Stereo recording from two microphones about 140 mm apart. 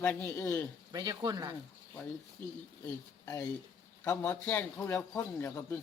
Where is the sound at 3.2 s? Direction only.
20° left (ahead or behind).